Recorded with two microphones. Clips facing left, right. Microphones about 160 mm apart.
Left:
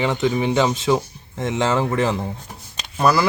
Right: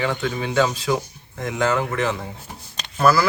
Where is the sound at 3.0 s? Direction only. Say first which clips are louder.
Even; 20° left (ahead or behind).